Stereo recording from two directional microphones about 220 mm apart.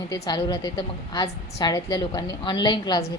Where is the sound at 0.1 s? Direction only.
20° left (ahead or behind).